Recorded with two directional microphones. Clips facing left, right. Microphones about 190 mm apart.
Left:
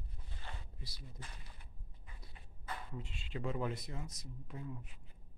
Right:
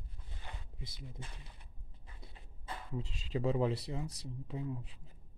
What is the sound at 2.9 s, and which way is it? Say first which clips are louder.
A man's voice: right 7 dB; 35° right (ahead or behind).